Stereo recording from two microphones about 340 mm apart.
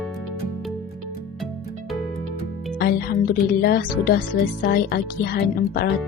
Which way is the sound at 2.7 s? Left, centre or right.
Left.